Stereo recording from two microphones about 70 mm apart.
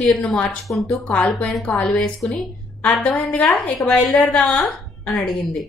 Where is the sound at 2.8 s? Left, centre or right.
Centre.